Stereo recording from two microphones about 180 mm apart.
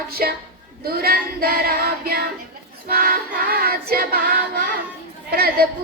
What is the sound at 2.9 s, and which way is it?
Music, 55° right (ahead or behind).